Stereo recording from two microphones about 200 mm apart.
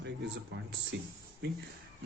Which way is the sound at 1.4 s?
60° right (ahead or behind).